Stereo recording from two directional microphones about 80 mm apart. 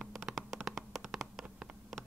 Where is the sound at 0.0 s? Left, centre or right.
Centre.